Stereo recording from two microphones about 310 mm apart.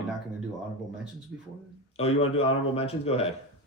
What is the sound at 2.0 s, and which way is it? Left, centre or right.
Speech, centre.